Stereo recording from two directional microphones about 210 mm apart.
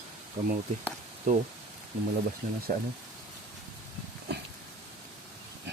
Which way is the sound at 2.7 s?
40° right (ahead or behind).